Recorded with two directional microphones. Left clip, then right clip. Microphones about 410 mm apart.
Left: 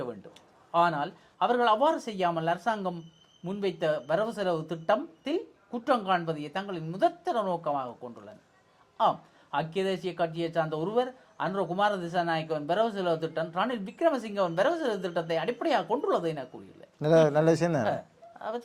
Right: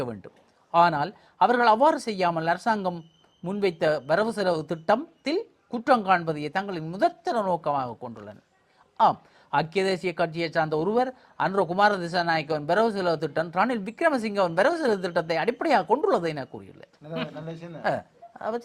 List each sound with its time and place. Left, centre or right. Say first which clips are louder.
0.7 s speech: right 5 dB; right
17.0 s speech: left 13 dB; left
17.8 s a sound: right 3 dB; right